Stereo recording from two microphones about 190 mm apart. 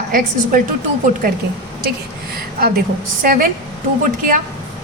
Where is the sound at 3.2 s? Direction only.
45° right (ahead or behind).